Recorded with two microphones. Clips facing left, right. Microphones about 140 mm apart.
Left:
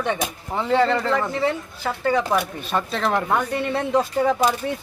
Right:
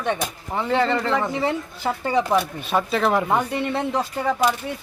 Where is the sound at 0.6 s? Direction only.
5° right (ahead or behind).